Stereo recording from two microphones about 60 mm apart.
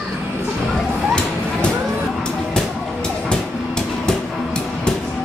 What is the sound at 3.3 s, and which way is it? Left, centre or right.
Train, centre.